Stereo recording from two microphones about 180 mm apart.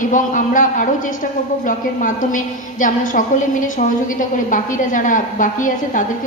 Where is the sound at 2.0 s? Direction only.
45° left (ahead or behind).